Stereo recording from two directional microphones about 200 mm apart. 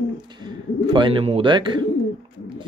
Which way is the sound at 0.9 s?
25° right (ahead or behind).